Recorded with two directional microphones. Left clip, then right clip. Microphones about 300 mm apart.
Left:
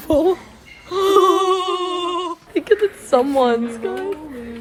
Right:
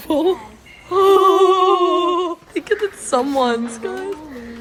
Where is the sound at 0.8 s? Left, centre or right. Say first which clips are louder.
Right 2 dB; centre.